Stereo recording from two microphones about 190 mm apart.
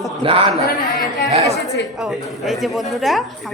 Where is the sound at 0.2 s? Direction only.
30° right (ahead or behind).